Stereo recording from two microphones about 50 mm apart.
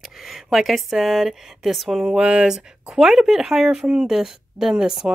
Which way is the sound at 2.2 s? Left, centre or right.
Centre.